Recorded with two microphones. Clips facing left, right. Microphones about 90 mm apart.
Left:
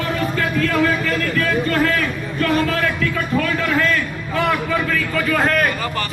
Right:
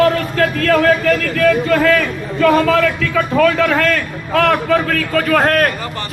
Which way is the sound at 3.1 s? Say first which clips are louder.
Right 7 dB; 90° right.